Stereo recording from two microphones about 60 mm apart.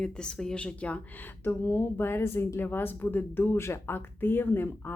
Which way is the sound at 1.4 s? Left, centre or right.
Left.